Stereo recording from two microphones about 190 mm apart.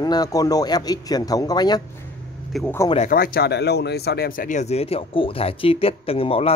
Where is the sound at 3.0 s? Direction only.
50° left (ahead or behind).